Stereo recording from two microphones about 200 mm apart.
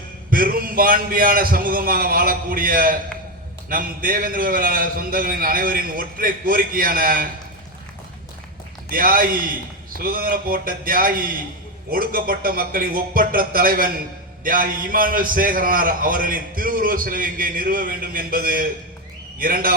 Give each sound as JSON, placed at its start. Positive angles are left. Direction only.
{"t": 0.3, "sound": "a man's voice", "side_deg": -45}
{"t": 8.9, "sound": "a man's voice", "side_deg": -45}